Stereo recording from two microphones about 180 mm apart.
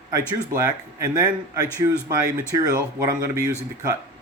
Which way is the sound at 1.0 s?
20° right (ahead or behind).